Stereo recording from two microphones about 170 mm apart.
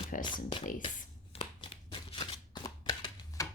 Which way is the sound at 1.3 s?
30° left (ahead or behind).